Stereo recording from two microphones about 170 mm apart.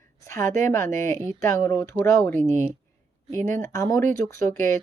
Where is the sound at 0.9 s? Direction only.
50° right (ahead or behind).